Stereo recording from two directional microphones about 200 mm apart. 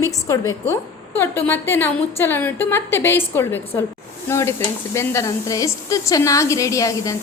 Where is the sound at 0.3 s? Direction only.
15° left (ahead or behind).